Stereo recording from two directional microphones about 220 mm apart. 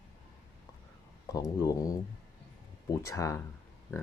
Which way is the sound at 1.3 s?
15° left (ahead or behind).